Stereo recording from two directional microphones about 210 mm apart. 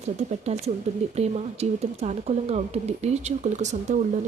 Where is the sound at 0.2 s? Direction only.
30° right (ahead or behind).